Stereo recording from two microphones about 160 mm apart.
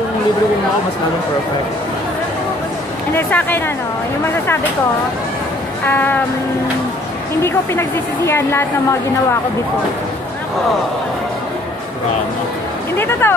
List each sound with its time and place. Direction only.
3.2 s speech: 10° left (ahead or behind)
5.9 s speech: 10° left (ahead or behind)
8.3 s speech: 15° left (ahead or behind)
12.9 s speech: 15° left (ahead or behind)